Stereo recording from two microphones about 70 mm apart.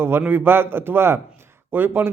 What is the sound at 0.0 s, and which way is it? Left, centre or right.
A man's voice, right.